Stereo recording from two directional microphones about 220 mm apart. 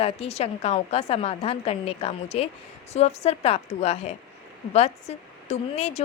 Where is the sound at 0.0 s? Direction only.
25° left (ahead or behind).